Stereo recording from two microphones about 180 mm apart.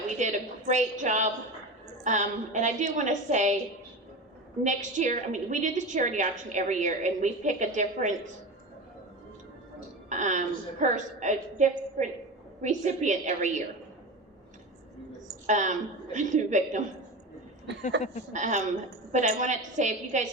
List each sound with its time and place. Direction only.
0.2 s a woman's voice: 40° right (ahead or behind)
4.6 s a woman's voice: 45° right (ahead or behind)
10.1 s a woman's voice: 40° right (ahead or behind)
15.4 s a woman's voice: 45° right (ahead or behind)
17.7 s speech: 75° right (ahead or behind)
18.3 s a woman's voice: 40° right (ahead or behind)